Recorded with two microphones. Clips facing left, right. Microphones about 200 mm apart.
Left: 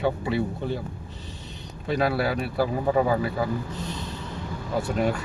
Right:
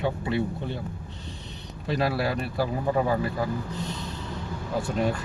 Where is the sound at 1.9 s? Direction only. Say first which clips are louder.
Left 2 dB; centre (ahead or behind).